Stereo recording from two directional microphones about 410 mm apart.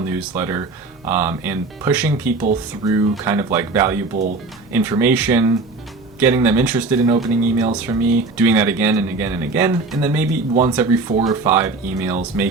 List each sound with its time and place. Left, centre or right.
0.0 s speech: centre
10.5 s speech: centre